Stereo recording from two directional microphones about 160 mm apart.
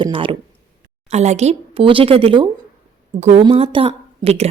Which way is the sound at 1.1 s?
45° right (ahead or behind).